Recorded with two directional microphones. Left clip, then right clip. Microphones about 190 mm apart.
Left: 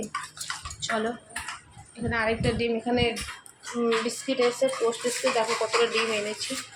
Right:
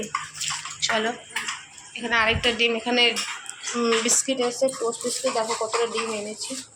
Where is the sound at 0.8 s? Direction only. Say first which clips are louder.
Right 5 dB; 20° left (ahead or behind).